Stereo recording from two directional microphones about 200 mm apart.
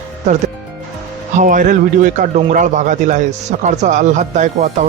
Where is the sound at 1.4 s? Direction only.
40° right (ahead or behind).